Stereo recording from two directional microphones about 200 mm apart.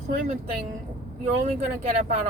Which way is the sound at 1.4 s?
35° right (ahead or behind).